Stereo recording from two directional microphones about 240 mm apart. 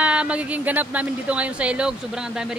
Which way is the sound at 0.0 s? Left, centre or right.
Centre.